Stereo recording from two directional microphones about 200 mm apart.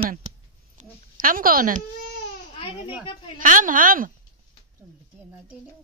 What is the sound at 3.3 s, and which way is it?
Speech, 40° right (ahead or behind).